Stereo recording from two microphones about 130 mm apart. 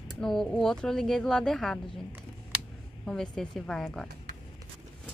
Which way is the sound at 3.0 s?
5° left (ahead or behind).